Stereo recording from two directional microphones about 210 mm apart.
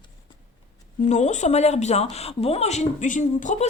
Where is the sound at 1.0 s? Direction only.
35° left (ahead or behind).